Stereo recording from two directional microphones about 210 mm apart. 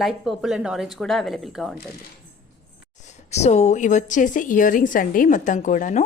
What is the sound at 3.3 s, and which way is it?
A woman's voice, 30° left (ahead or behind).